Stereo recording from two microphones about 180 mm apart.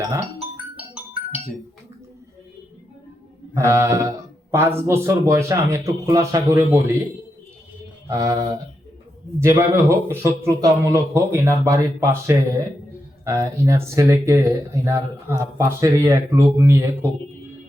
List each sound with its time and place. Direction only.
0.0 s speech: 20° right (ahead or behind)
3.5 s speech: 15° right (ahead or behind)
8.0 s a sound: 20° right (ahead or behind)
9.4 s speech: 15° right (ahead or behind)